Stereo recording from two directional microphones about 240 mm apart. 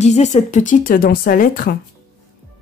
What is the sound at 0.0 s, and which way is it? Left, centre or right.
Speech, left.